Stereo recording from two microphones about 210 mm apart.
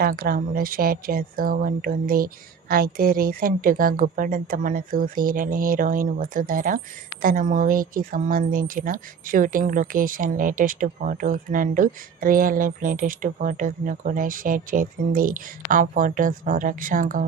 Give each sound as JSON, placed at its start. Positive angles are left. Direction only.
{"t": 0.0, "sound": "speech", "side_deg": -45}